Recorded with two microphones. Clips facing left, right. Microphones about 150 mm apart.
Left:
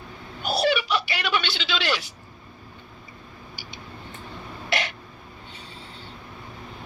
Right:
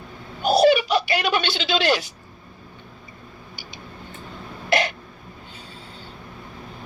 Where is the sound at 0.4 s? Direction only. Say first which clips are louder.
Right 7 dB; 40° right (ahead or behind).